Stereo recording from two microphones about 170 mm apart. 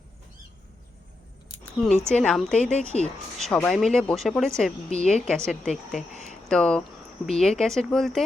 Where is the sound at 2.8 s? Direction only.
40° right (ahead or behind).